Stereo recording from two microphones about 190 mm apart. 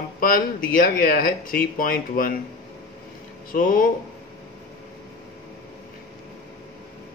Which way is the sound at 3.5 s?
45° left (ahead or behind).